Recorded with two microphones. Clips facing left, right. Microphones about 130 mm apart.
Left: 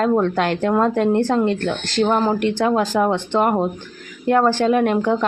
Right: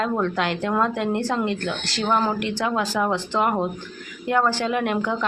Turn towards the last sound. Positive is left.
turn(degrees=35)  # may be behind; listen again after turning